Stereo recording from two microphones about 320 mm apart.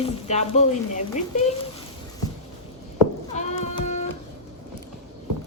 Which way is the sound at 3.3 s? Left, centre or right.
Left.